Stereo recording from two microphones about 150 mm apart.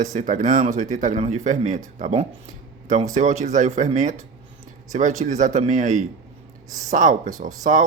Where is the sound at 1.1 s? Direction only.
45° right (ahead or behind).